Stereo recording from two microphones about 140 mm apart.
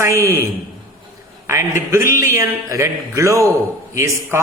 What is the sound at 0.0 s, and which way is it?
Speech, 20° right (ahead or behind).